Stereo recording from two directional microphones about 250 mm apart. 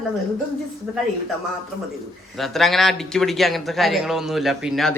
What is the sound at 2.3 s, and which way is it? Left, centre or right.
Speech, centre.